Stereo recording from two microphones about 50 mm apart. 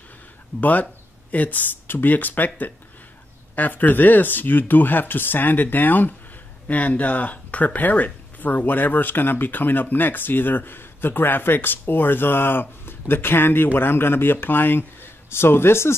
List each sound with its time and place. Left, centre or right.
0.6 s speech: left